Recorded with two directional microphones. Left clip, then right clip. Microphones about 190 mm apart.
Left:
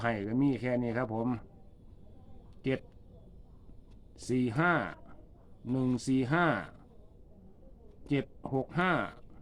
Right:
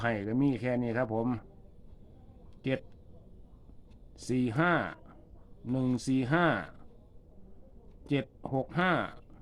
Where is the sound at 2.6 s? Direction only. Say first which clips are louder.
Even; 15° right (ahead or behind).